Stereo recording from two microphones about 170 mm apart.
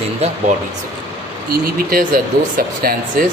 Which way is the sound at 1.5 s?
60° right (ahead or behind).